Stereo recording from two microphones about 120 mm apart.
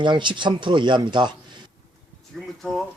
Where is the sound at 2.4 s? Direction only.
Centre (ahead or behind).